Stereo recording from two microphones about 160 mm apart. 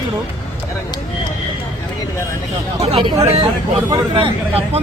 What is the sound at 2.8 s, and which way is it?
Speech, 35° right (ahead or behind).